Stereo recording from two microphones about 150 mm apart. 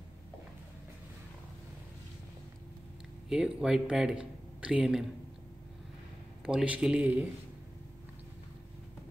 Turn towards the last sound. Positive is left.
turn(degrees=-10)  # may be behind; listen again after turning